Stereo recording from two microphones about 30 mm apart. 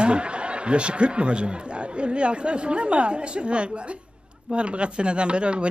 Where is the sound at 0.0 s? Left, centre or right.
Right.